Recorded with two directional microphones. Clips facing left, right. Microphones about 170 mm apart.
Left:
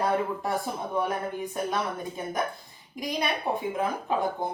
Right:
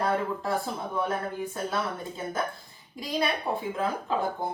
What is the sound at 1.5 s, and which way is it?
Speech, 15° left (ahead or behind).